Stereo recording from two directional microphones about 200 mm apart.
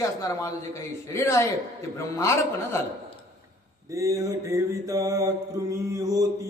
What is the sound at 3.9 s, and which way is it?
Mantra, 15° right (ahead or behind).